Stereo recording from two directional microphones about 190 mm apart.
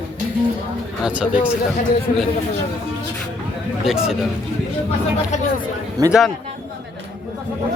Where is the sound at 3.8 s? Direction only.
5° right (ahead or behind).